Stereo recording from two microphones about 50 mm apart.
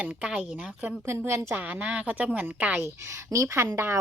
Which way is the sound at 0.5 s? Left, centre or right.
Right.